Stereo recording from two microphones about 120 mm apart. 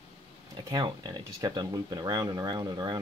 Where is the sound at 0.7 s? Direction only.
35° right (ahead or behind).